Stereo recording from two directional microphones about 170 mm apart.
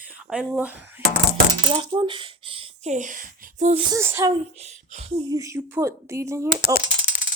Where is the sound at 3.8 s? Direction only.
20° right (ahead or behind).